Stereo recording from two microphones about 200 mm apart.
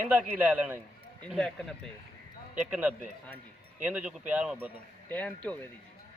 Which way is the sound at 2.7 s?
10° right (ahead or behind).